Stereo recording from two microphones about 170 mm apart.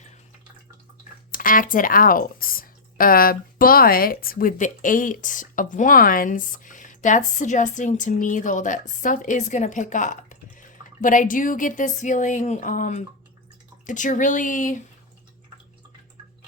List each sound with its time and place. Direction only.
1.3 s speech: 55° left (ahead or behind)